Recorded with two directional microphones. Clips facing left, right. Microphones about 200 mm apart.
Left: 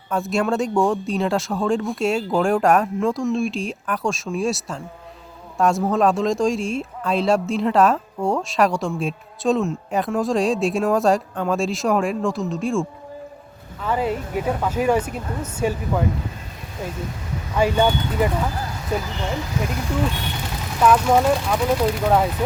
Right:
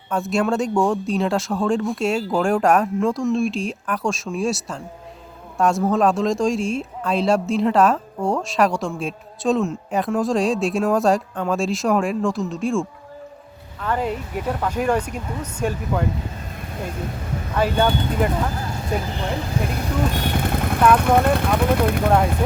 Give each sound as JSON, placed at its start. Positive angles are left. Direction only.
{"t": 0.1, "sound": "speech", "side_deg": 0}
{"t": 13.8, "sound": "speech", "side_deg": 5}
{"t": 17.5, "sound": "speech", "side_deg": 10}
{"t": 20.1, "sound": "speech", "side_deg": -50}
{"t": 22.0, "sound": "speech", "side_deg": 0}